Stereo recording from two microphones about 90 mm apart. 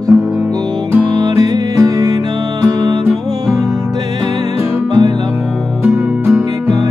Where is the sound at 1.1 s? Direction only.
45° right (ahead or behind).